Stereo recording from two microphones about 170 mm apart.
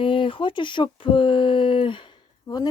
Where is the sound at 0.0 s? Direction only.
30° left (ahead or behind).